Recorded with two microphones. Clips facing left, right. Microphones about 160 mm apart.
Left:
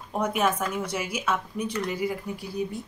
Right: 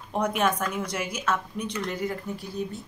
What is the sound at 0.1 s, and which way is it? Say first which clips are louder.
A woman's voice: even; 5° left (ahead or behind).